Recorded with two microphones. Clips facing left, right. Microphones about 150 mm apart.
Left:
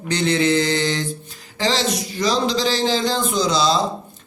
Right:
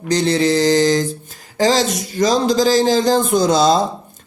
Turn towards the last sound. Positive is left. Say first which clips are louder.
# right 5 dB
turn(degrees=-50)  # may be behind; listen again after turning